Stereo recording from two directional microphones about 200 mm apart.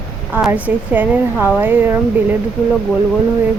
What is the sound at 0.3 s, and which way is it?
A woman's voice, 10° right (ahead or behind).